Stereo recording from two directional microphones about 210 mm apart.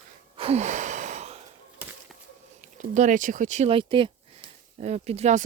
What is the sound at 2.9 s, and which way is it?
Speech, 35° right (ahead or behind).